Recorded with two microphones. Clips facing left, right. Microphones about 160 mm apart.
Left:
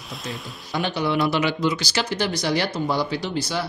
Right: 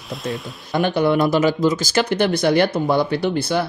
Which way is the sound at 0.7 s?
50° right (ahead or behind).